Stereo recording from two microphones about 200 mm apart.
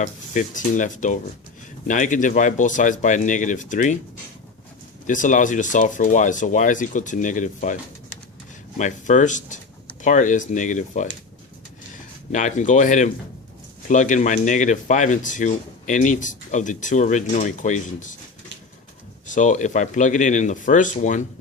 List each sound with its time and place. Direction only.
0.0 s speech: 40° left (ahead or behind)
5.0 s speech: 40° left (ahead or behind)
8.8 s speech: 40° left (ahead or behind)
12.3 s speech: 40° left (ahead or behind)
19.3 s speech: 40° left (ahead or behind)